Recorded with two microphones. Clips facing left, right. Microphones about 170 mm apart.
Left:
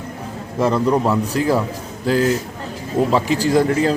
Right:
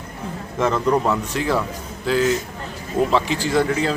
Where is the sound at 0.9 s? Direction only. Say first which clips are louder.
Left 2 dB; 10° left (ahead or behind).